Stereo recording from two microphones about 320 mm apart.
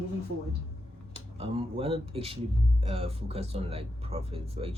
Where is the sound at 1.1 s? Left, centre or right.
Centre.